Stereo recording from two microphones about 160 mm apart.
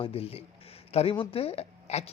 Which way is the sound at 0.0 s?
40° left (ahead or behind).